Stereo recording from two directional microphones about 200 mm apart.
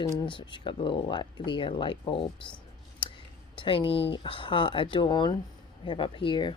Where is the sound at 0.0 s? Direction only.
20° left (ahead or behind).